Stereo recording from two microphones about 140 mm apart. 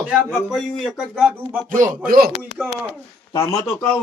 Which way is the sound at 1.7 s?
80° right.